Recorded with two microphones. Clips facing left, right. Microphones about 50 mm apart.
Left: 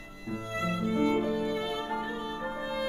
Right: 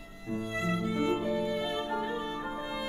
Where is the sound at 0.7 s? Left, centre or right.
Centre.